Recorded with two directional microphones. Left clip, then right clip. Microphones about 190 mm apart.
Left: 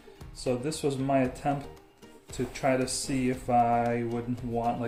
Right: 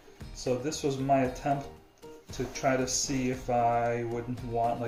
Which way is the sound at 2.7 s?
45° left (ahead or behind).